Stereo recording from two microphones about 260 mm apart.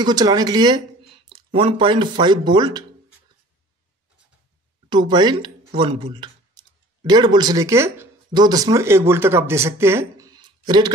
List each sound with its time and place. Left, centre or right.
0.0 s speech: centre
4.8 s speech: centre